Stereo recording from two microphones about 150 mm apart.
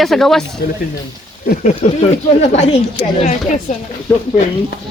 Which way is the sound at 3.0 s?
90° left.